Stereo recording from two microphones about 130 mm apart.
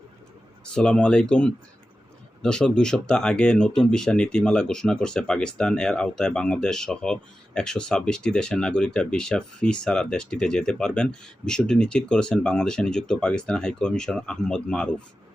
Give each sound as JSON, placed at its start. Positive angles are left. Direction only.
{"t": 0.6, "sound": "speech", "side_deg": 5}